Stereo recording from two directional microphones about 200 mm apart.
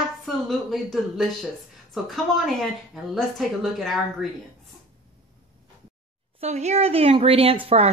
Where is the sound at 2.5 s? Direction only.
Centre (ahead or behind).